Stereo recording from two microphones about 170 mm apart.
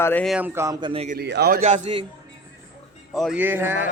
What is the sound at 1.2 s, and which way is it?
Speech, 75° right (ahead or behind).